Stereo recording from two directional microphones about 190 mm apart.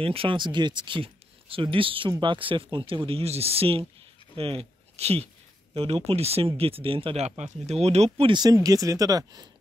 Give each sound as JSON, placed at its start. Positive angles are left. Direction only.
{"t": 0.0, "sound": "speech", "side_deg": -30}